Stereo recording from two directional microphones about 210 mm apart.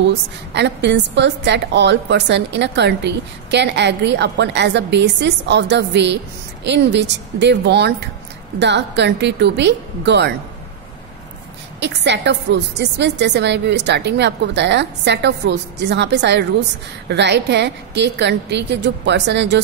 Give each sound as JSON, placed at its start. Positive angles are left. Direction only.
{"t": 0.0, "sound": "a woman's voice", "side_deg": -55}
{"t": 11.8, "sound": "a woman's voice", "side_deg": -55}